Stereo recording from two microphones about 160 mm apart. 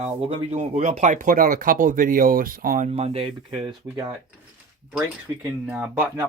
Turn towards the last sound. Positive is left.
turn(degrees=-10)  # may be behind; listen again after turning